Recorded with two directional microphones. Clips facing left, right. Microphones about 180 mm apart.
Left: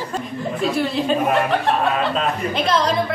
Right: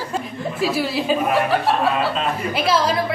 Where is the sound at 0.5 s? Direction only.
5° right (ahead or behind).